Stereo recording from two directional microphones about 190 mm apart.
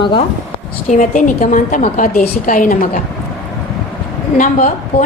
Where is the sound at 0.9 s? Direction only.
40° left (ahead or behind).